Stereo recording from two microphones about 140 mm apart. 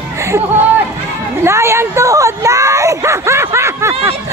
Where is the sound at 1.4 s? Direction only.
20° right (ahead or behind).